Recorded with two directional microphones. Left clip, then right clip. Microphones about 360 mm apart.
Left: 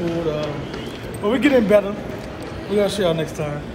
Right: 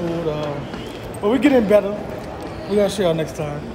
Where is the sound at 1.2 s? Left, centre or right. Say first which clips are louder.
Right 1 dB; centre.